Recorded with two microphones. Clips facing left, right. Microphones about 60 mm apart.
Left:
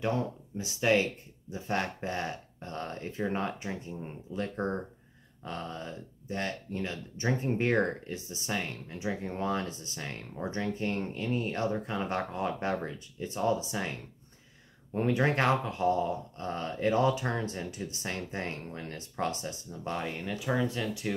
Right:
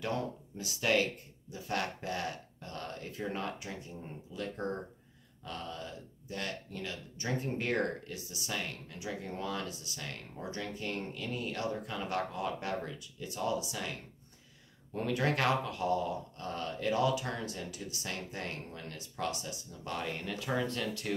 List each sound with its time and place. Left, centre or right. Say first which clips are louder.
0.0 s speech: left 4 dB; left
15.0 s speech: left 4 dB; left
20.2 s speech: left 5 dB; centre